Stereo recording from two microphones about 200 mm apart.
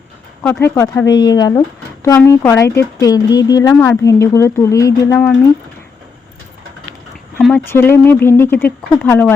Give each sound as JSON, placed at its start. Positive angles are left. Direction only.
{"t": 0.4, "sound": "speech", "side_deg": 10}
{"t": 7.3, "sound": "speech", "side_deg": 5}